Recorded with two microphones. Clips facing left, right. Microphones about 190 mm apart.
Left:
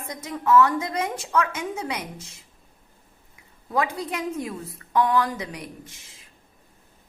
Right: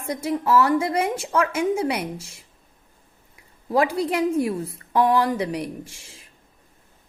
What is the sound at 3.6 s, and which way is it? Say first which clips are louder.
A woman's voice: right 5 dB; 30° right (ahead or behind).